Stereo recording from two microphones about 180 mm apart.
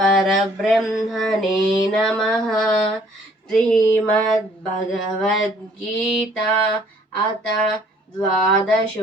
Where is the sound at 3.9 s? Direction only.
10° left (ahead or behind).